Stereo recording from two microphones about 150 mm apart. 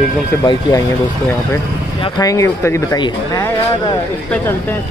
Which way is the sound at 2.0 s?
25° left (ahead or behind).